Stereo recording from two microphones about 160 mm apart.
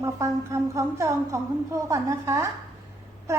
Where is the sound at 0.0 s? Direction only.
20° right (ahead or behind).